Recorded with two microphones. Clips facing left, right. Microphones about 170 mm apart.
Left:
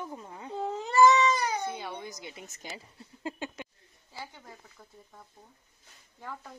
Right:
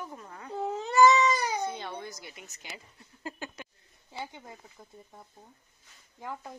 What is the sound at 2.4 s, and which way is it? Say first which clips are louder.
Speech: left 4 dB; 45° left (ahead or behind).